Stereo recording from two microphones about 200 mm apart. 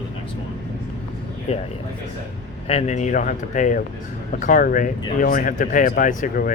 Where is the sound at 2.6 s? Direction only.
35° left (ahead or behind).